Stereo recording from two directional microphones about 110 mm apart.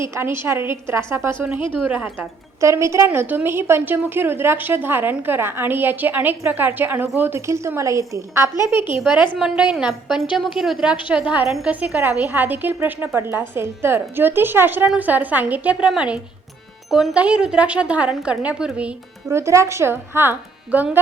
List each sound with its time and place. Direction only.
0.0 s a woman's voice: 25° right (ahead or behind)
2.6 s a woman's voice: 25° right (ahead or behind)
3.1 s a woman's voice: 15° right (ahead or behind)
9.4 s a woman's voice: 5° right (ahead or behind)
19.3 s a woman's voice: 25° right (ahead or behind)